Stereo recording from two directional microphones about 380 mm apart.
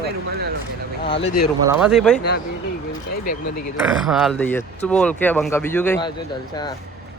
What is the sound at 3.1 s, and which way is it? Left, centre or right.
Speech, left.